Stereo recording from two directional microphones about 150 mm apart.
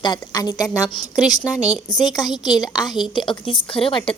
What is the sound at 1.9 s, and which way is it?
A woman's voice, 25° left (ahead or behind).